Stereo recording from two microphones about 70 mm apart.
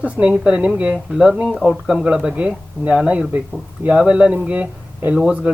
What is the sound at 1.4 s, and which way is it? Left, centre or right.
Speech, centre.